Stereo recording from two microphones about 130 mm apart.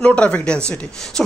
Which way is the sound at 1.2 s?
5° left (ahead or behind).